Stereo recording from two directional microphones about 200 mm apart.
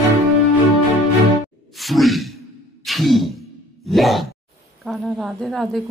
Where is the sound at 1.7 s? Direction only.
Centre (ahead or behind).